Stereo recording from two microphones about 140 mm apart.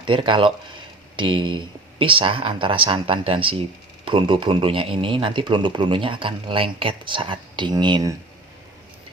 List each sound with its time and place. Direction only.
0.0 s speech: 35° right (ahead or behind)